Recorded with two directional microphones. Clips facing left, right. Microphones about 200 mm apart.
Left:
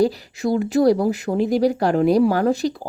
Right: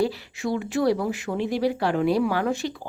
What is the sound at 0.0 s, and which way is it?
Speech, 40° left (ahead or behind).